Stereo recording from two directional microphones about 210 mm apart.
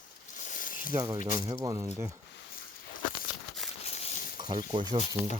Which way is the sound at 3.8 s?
30° left (ahead or behind).